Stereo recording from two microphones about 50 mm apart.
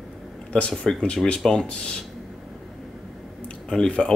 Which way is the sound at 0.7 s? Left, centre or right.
Centre.